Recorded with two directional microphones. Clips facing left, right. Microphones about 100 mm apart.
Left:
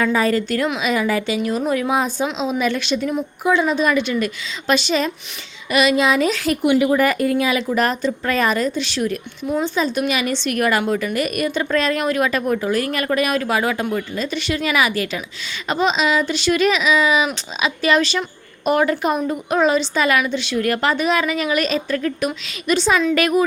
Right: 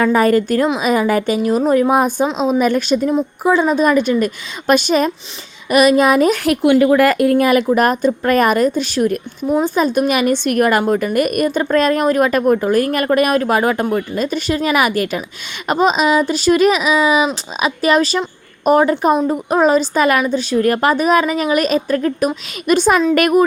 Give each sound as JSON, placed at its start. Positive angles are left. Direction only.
{"t": 0.0, "sound": "a woman's voice", "side_deg": -45}
{"t": 22.6, "sound": "a woman's voice", "side_deg": -50}